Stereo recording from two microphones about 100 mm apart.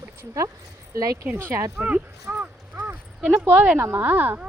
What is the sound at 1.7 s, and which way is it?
Speech, 15° right (ahead or behind).